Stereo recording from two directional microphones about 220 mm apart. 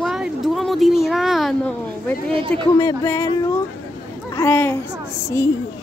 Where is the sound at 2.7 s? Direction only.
10° left (ahead or behind).